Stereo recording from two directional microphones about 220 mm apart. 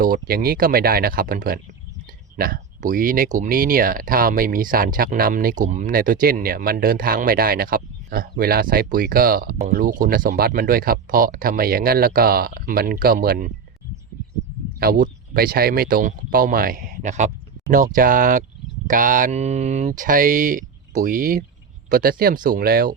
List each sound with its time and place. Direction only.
0.0 s speech: 40° right (ahead or behind)
14.8 s speech: 40° right (ahead or behind)